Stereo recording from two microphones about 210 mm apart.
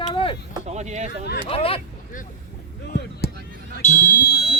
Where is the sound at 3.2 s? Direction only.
50° left (ahead or behind).